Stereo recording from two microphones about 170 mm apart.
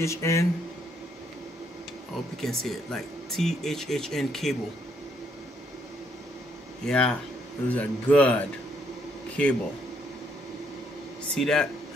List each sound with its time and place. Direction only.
0.0 s a man's voice: 15° left (ahead or behind)
2.4 s speech: 5° left (ahead or behind)
6.8 s a man's voice: 5° left (ahead or behind)
11.3 s speech: 5° left (ahead or behind)